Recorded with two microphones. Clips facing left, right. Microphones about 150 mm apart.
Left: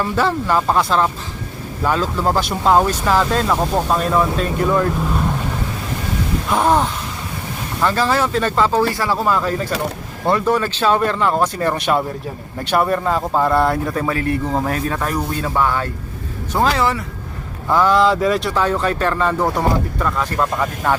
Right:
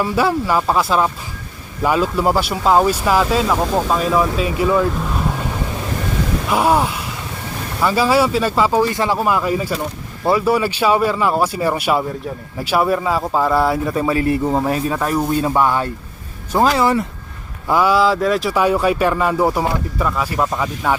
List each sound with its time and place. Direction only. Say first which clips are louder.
0.0 s speech: right 2 dB; 10° right (ahead or behind)
6.5 s speech: even; 10° right (ahead or behind)
13.9 s speech: right 3 dB; 15° right (ahead or behind)